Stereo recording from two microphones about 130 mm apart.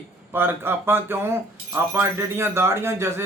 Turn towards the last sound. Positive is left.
turn(degrees=-20)  # may be behind; listen again after turning